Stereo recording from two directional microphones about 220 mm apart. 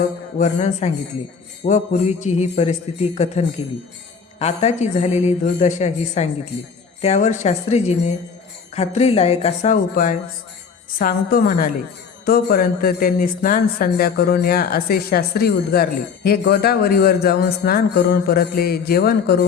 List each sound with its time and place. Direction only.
0.3 s a woman's voice: 30° left (ahead or behind)